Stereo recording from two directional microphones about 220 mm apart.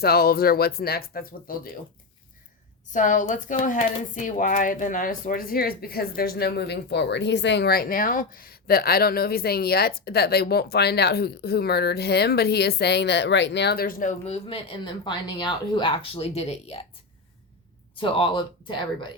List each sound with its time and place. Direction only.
0.0 s speech: 45° left (ahead or behind)
2.9 s speech: 35° left (ahead or behind)
17.9 s speech: 25° left (ahead or behind)